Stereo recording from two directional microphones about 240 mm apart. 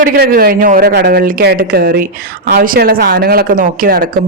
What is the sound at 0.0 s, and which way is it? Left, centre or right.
A woman's voice, right.